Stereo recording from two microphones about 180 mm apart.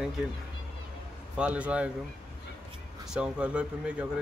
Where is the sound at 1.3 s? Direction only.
5° right (ahead or behind).